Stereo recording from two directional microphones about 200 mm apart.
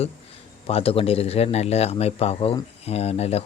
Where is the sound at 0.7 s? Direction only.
30° left (ahead or behind).